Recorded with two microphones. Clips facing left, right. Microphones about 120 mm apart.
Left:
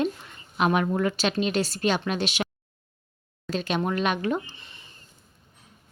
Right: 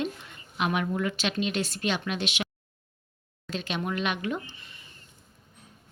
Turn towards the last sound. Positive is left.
turn(degrees=25)  # may be behind; listen again after turning